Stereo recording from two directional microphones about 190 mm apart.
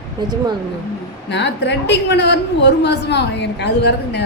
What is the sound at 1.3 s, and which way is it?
A woman's voice, 70° left (ahead or behind).